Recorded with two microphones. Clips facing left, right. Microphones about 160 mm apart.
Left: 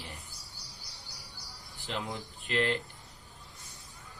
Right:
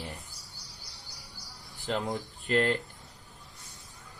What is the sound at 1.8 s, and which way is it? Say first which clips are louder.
Speech: right 6 dB; 40° right (ahead or behind).